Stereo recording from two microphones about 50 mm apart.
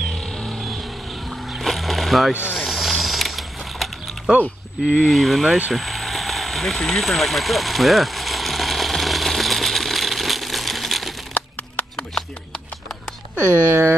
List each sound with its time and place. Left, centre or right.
0.0 s music: centre
1.3 s music: centre
2.6 s ratchet: centre
5.0 s speech: centre
5.7 s vehicle: centre
11.3 s crack: left
13.4 s speech: right